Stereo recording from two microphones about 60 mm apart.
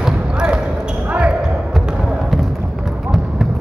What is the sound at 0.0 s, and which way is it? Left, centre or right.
Basketball bounce, centre.